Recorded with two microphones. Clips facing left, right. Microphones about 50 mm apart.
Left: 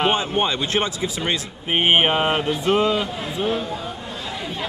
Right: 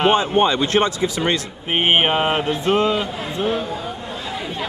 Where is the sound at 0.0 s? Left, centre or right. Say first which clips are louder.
Right 4 dB; centre.